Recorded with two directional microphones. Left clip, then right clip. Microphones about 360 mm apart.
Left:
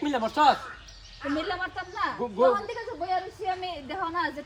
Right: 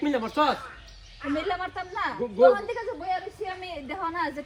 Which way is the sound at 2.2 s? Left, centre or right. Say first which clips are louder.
Right 1 dB; centre.